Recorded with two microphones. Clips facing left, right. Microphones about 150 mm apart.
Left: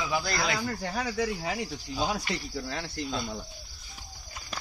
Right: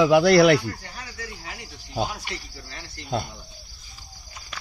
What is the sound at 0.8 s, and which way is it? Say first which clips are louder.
Speech: left 10 dB; 90° left.